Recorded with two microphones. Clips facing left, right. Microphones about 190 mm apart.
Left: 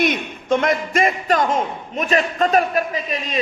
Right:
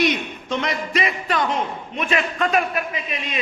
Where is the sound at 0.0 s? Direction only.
50° left (ahead or behind).